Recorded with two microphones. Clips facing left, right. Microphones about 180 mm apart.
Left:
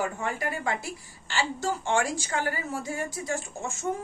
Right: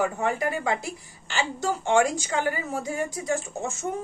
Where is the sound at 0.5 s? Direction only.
20° right (ahead or behind).